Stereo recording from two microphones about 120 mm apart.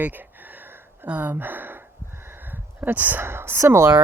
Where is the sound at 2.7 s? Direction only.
15° right (ahead or behind).